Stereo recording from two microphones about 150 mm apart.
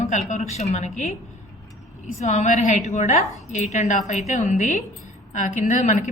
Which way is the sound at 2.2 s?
50° left (ahead or behind).